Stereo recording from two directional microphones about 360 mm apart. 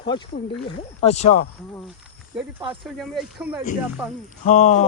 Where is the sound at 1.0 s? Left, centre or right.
Centre.